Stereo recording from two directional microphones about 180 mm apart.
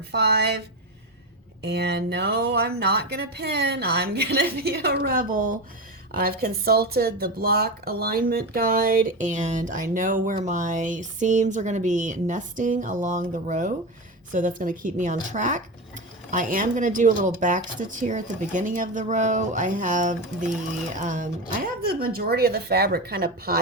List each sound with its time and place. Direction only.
0.1 s speech: 65° right (ahead or behind)
1.6 s speech: 65° right (ahead or behind)